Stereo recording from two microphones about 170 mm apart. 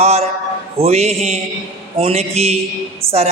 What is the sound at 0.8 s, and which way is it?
Music, 40° right (ahead or behind).